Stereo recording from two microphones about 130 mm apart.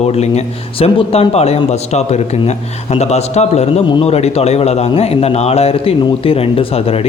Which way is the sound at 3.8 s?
35° left (ahead or behind).